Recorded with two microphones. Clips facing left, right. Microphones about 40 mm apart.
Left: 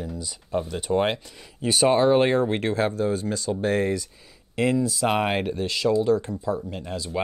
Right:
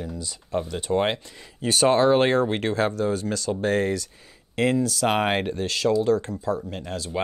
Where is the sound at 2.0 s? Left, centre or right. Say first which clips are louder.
Even; right.